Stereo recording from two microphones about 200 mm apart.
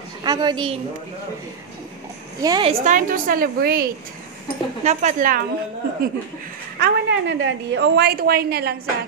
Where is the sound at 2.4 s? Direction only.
25° right (ahead or behind).